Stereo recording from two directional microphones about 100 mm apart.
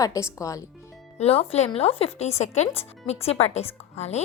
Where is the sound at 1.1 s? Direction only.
85° left.